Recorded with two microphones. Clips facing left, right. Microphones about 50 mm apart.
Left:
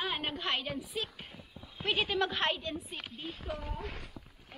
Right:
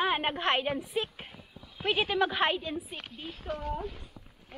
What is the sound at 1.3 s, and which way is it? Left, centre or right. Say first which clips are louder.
Speech: even; centre.